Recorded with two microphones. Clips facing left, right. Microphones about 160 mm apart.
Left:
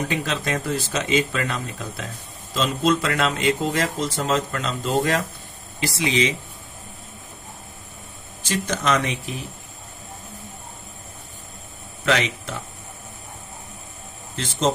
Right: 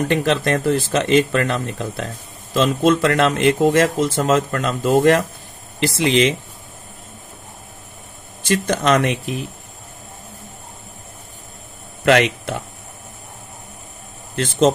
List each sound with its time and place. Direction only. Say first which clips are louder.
0.0 s speech: right 7 dB; 55° right (ahead or behind)
6.0 s speech: right 6 dB; 65° right (ahead or behind)
8.6 s speech: right 5 dB; 55° right (ahead or behind)
12.0 s speech: right 7 dB; 60° right (ahead or behind)
14.3 s speech: right 8 dB; 55° right (ahead or behind)